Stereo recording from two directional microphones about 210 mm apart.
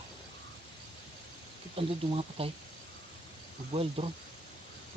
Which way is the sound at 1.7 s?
25° right (ahead or behind).